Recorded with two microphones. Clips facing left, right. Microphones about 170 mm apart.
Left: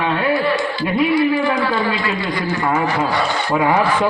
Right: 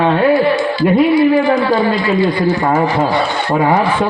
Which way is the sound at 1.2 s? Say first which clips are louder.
Right 5 dB; 30° right (ahead or behind).